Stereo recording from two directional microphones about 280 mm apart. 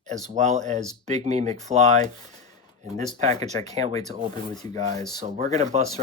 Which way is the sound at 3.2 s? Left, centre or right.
Right.